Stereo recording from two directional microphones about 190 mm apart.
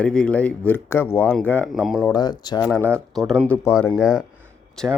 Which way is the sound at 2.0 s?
20° left (ahead or behind).